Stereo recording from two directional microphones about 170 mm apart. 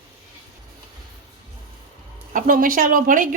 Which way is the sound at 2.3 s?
55° right (ahead or behind).